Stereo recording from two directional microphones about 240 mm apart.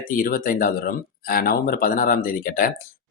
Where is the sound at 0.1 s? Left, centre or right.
Left.